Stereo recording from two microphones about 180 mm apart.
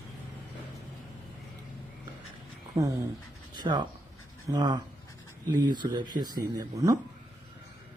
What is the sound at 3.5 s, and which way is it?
Speech, 25° right (ahead or behind).